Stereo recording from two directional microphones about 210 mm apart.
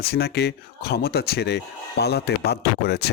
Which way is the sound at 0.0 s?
50° left (ahead or behind).